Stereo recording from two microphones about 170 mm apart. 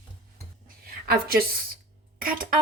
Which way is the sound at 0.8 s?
65° right (ahead or behind).